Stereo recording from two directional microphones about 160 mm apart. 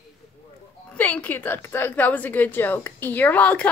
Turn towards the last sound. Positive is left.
turn(degrees=10)  # may be behind; listen again after turning